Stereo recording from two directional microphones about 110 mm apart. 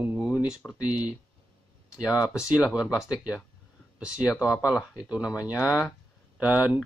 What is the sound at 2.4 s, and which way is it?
Speech, 10° right (ahead or behind).